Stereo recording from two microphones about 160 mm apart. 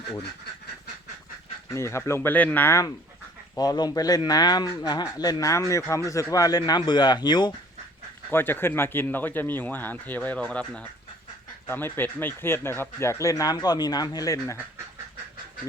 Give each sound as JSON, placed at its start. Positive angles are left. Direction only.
{"t": 1.7, "sound": "speech", "side_deg": 15}
{"t": 8.3, "sound": "speech", "side_deg": 15}